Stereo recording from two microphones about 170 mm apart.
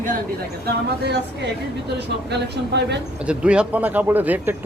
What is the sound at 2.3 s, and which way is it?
Speech, 90° right.